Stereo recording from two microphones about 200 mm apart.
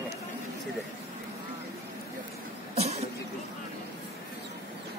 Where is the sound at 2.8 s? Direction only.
30° right (ahead or behind).